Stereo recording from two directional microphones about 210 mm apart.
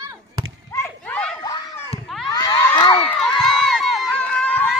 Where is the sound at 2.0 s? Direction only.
Centre (ahead or behind).